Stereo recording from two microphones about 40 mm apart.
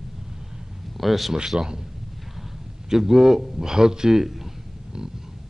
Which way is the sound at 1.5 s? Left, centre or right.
Right.